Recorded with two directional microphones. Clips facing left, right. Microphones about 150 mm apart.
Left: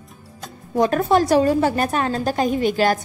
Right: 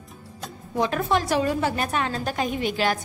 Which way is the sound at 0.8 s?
45° left (ahead or behind).